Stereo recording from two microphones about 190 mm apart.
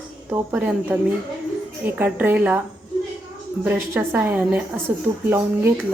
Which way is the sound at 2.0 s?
10° right (ahead or behind).